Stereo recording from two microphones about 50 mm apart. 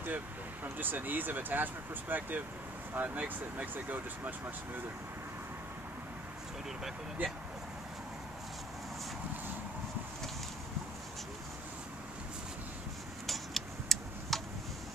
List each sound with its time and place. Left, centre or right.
0.7 s speech: right
7.2 s speech: right
13.3 s tick-tock: centre